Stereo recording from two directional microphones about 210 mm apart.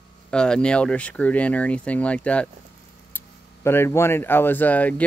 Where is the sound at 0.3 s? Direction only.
5° left (ahead or behind).